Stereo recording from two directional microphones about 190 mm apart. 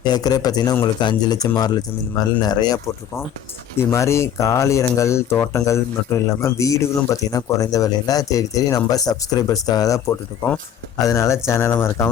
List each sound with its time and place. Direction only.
0.0 s speech: 20° left (ahead or behind)